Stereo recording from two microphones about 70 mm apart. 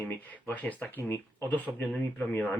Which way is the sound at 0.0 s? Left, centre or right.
Left.